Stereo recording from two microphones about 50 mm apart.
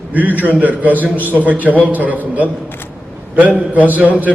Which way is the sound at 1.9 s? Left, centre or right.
Right.